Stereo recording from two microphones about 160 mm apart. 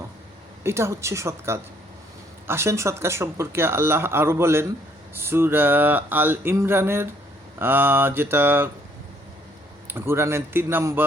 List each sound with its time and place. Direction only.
0.6 s speech: 15° right (ahead or behind)
9.8 s speech: 15° right (ahead or behind)